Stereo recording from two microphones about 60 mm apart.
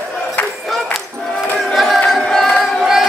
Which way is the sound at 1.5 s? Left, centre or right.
Centre.